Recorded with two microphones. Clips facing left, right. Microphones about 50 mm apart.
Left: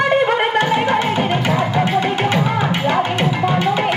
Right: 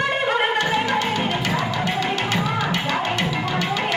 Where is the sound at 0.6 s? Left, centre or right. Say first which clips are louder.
Left 5 dB; left.